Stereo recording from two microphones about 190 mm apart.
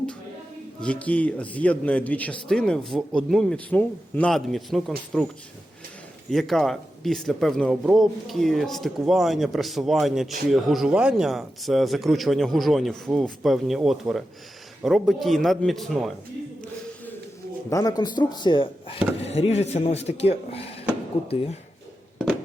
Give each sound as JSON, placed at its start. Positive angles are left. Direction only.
{"t": 0.8, "sound": "a man's voice", "side_deg": 5}
{"t": 6.3, "sound": "a man's voice", "side_deg": 0}
{"t": 17.7, "sound": "speech", "side_deg": 20}